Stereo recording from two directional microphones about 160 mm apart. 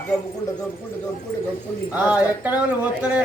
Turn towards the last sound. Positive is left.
turn(degrees=-5)  # may be behind; listen again after turning